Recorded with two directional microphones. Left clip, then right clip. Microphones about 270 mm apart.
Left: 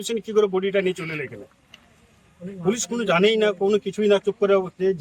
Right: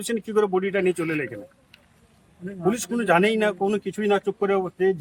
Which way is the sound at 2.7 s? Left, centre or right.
Centre.